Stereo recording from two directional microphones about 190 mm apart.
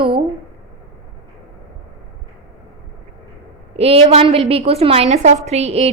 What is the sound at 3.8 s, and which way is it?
A woman's voice, 30° right (ahead or behind).